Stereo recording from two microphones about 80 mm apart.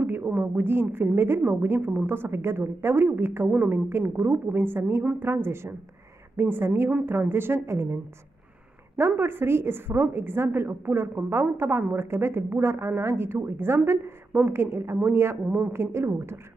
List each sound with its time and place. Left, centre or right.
0.0 s a woman's voice: right